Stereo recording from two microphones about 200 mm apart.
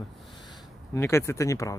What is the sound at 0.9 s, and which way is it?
Speech, 15° left (ahead or behind).